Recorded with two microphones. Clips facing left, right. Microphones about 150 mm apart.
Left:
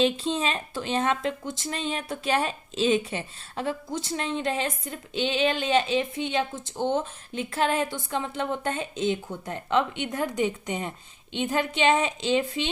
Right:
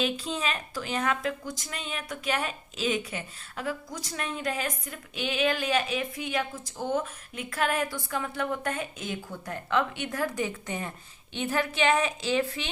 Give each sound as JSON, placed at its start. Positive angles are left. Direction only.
{"t": 0.0, "sound": "speech", "side_deg": 30}